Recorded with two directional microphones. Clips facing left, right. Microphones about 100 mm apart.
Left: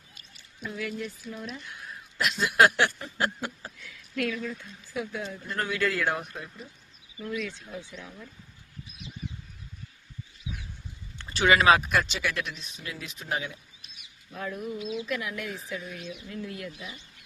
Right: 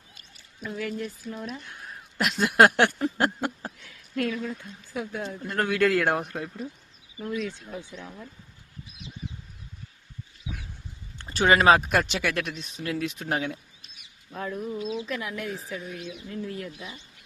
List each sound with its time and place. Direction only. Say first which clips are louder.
0.8 s a sound: right 2 dB; 40° right (ahead or behind)
4.1 s speech: right 2 dB; 35° right (ahead or behind)
4.9 s speech: right 1 dB; 45° right (ahead or behind)
7.2 s speech: right 2 dB; 35° right (ahead or behind)
11.3 s speech: right 2 dB; 40° right (ahead or behind)
14.3 s speech: right 2 dB; 35° right (ahead or behind)